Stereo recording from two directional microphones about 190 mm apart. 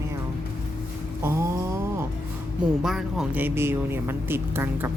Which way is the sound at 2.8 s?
Centre (ahead or behind).